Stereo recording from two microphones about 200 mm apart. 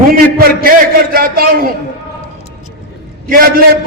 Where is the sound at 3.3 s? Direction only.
45° right (ahead or behind).